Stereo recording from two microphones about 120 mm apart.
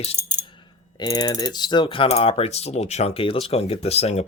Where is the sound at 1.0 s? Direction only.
30° left (ahead or behind); by 4.2 s 60° left (ahead or behind).